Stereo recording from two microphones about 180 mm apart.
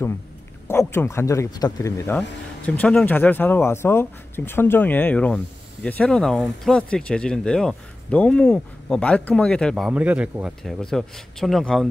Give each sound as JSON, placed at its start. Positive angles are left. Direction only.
{"t": 0.7, "sound": "a man's voice", "side_deg": 15}